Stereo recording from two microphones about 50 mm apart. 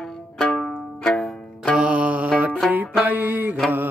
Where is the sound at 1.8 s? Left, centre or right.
Right.